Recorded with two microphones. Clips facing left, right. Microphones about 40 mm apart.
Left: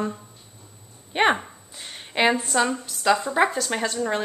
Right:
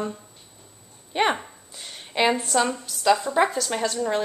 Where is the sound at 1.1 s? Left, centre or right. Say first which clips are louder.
Left 2 dB; centre.